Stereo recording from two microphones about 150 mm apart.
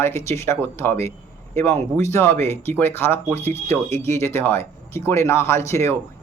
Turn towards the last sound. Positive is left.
turn(degrees=20)  # may be behind; listen again after turning